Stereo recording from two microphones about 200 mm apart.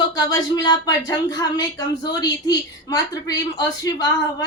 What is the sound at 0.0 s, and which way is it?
A woman's voice, 20° left (ahead or behind).